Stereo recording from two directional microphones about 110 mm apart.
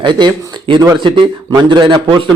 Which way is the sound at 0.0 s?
45° right (ahead or behind).